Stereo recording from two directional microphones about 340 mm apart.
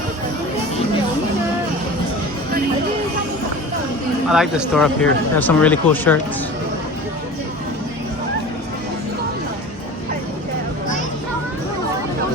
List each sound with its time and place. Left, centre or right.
4.3 s speech: centre